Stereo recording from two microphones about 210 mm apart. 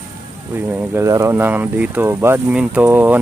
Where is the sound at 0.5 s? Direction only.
10° right (ahead or behind).